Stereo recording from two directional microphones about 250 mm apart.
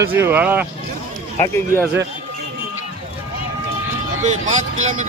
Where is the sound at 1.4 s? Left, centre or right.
Centre.